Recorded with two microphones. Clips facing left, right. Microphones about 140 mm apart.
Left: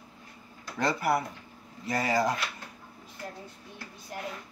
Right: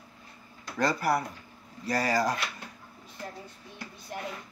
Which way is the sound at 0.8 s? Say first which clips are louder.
Even; 20° left (ahead or behind).